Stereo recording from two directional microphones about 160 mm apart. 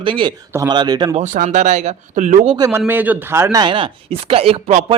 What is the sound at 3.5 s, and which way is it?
Speech, 30° right (ahead or behind).